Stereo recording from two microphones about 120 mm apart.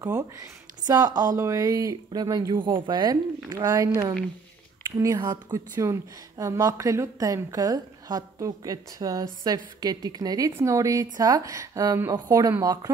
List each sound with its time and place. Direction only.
0.0 s a woman's voice: 30° right (ahead or behind)
5.2 s speech: 40° right (ahead or behind)
5.8 s a woman's voice: 25° right (ahead or behind)